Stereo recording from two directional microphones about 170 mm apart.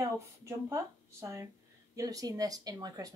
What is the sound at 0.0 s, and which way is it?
Speech, 15° right (ahead or behind).